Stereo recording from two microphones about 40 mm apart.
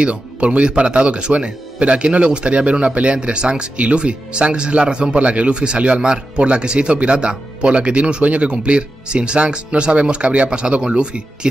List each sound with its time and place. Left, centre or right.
0.0 s speech: right